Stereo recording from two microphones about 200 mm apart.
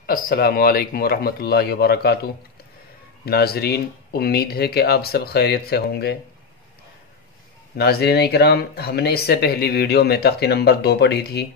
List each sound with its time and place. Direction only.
0.0 s speech: 50° left (ahead or behind)
3.3 s speech: 50° left (ahead or behind)
7.7 s speech: 50° left (ahead or behind)